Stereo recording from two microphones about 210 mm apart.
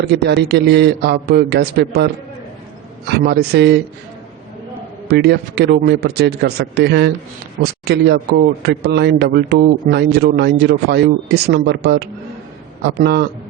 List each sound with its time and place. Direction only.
0.0 s a man's voice: 50° right (ahead or behind)
3.1 s a man's voice: 50° right (ahead or behind)
5.0 s a man's voice: 50° right (ahead or behind)